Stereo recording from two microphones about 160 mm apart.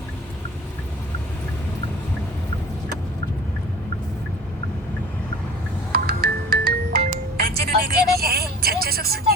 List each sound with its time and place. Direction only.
5.9 s music: 80° right